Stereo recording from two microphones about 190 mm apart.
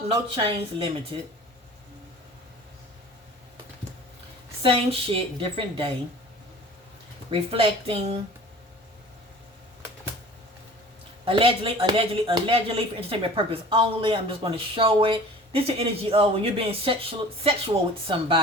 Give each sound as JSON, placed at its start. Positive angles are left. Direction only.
{"t": 0.3, "sound": "speech", "side_deg": -30}
{"t": 4.6, "sound": "speech", "side_deg": -30}
{"t": 7.3, "sound": "speech", "side_deg": -30}
{"t": 11.3, "sound": "speech", "side_deg": -30}